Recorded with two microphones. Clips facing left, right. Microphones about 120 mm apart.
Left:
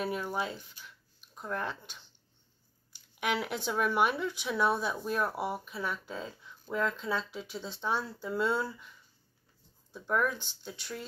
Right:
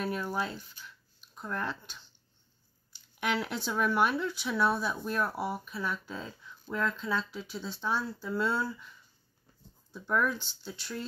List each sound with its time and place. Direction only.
0.0 s speech: 15° left (ahead or behind)
9.9 s speech: 10° left (ahead or behind)